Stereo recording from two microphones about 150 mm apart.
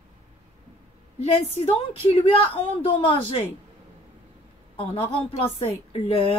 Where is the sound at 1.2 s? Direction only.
40° left (ahead or behind).